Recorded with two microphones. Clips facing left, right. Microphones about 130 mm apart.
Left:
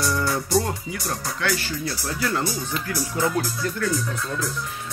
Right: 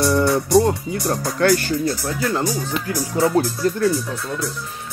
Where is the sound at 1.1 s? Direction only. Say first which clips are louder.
Right 9 dB; 45° right (ahead or behind).